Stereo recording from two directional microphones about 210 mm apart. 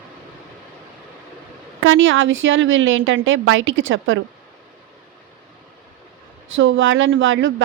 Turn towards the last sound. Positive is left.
turn(degrees=-65)  # may be behind; listen again after turning